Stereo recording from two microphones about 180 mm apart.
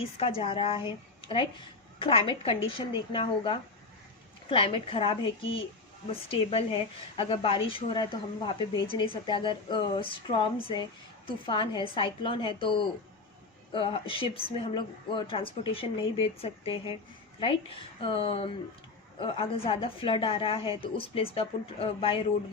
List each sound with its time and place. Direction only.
0.2 s a woman's voice: 30° left (ahead or behind)